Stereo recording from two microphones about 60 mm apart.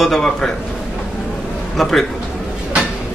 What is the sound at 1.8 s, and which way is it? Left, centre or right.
Speech, centre.